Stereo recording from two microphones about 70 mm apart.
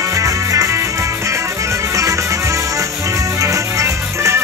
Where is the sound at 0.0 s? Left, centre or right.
Right.